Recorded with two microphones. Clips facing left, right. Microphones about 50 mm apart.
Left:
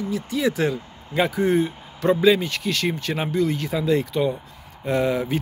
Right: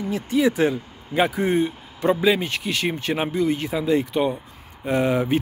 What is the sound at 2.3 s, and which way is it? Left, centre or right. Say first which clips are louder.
Speech: even; right.